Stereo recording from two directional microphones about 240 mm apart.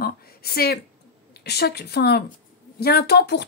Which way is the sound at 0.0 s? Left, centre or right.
Left.